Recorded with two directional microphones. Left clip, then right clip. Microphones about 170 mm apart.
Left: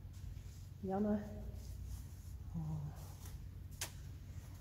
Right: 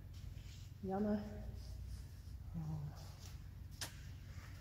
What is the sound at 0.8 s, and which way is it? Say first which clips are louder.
Speech: left 2 dB; 5° right (ahead or behind).